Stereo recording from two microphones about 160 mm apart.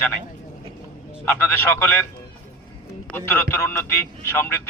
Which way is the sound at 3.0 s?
15° left (ahead or behind).